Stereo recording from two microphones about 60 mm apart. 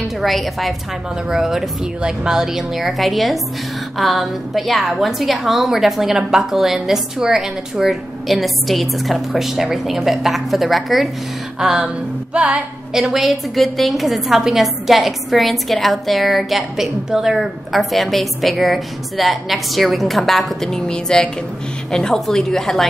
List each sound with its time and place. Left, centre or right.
0.2 s a woman's voice: centre
1.3 s a sound: centre
2.0 s a woman's voice: centre
11.6 s a sound: centre
12.4 s music: right
12.9 s a woman's voice: centre